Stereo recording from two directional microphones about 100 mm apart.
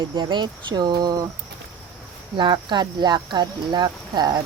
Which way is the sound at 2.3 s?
50° right (ahead or behind).